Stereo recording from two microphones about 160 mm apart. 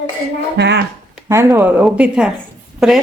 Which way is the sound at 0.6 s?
90° right.